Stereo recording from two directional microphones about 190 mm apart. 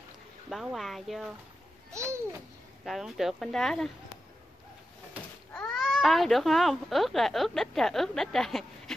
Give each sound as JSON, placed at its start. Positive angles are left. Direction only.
{"t": 0.5, "sound": "speech", "side_deg": 0}
{"t": 1.9, "sound": "a child's voice", "side_deg": -15}
{"t": 2.8, "sound": "speech", "side_deg": 0}
{"t": 5.5, "sound": "speech", "side_deg": 5}